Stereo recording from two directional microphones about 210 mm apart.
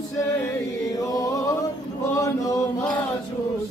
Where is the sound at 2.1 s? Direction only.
15° left (ahead or behind).